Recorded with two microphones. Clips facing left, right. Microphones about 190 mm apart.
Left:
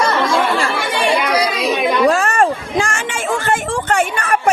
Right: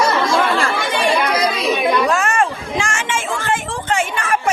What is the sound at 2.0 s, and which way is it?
Chatter, 35° left (ahead or behind).